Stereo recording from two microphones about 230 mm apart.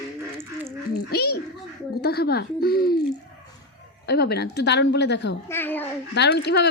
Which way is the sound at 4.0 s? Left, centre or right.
Left.